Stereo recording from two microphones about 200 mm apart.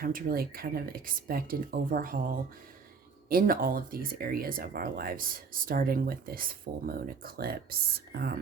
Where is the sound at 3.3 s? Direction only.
45° right (ahead or behind).